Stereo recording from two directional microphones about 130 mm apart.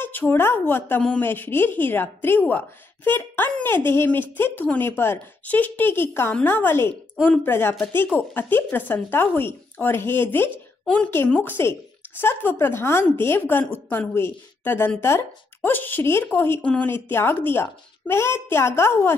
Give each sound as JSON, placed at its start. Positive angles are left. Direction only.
{"t": 0.0, "sound": "a woman's voice", "side_deg": 15}